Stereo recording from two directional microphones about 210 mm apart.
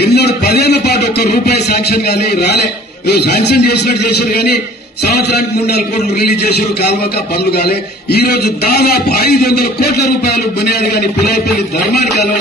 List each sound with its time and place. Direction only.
0.0 s a man's voice: 50° left (ahead or behind)